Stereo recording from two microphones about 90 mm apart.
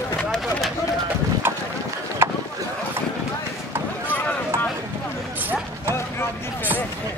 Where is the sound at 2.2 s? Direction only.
25° right (ahead or behind).